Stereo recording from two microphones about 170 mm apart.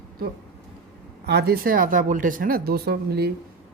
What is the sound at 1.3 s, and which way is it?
Speech, 70° right (ahead or behind).